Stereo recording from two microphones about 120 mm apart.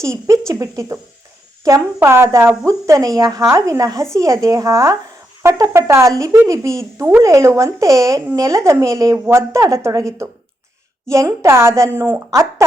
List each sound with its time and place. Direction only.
0.0 s speech: 25° right (ahead or behind)
9.1 s speech: 15° right (ahead or behind)
9.5 s speech: 25° right (ahead or behind)